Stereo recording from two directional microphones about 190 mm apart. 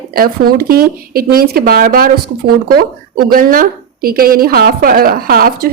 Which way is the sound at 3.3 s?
45° right (ahead or behind).